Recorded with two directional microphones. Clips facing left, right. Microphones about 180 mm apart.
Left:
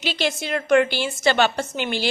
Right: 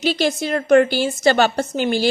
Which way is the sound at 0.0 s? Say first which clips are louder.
Right 6 dB; 40° right (ahead or behind).